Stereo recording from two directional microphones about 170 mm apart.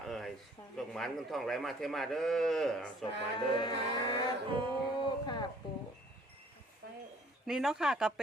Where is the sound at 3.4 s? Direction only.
25° left (ahead or behind).